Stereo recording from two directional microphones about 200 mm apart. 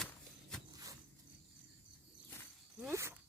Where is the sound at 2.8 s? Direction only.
10° right (ahead or behind).